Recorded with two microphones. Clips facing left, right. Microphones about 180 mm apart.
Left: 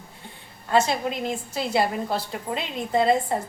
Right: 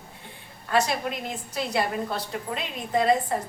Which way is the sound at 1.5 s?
30° left (ahead or behind).